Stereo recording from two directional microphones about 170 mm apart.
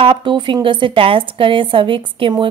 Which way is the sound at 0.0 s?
30° right (ahead or behind).